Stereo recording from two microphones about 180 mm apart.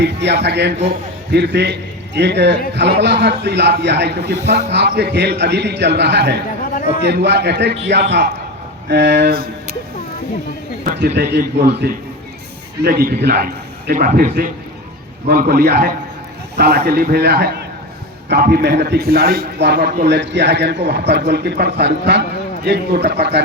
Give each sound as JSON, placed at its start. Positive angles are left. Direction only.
{"t": 0.0, "sound": "a man's voice", "side_deg": -70}
{"t": 6.7, "sound": "a sound", "side_deg": 50}
{"t": 7.0, "sound": "a man's voice", "side_deg": -70}
{"t": 11.0, "sound": "a man's voice", "side_deg": -70}
{"t": 12.8, "sound": "a man's voice", "side_deg": -55}